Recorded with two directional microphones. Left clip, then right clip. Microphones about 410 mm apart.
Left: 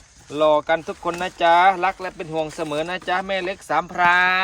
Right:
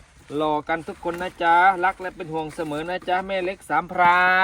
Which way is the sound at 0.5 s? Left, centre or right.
Centre.